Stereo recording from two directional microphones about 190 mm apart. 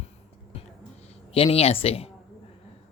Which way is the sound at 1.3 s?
30° left (ahead or behind).